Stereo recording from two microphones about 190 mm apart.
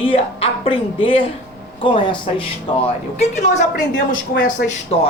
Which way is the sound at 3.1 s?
35° left (ahead or behind).